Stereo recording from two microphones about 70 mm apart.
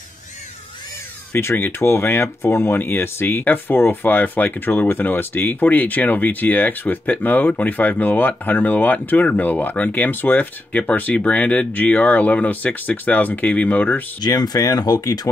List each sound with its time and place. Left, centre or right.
1.4 s speech: left
14.2 s speech: left